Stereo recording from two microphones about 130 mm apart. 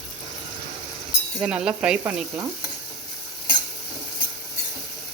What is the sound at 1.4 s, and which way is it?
Speech, 5° right (ahead or behind).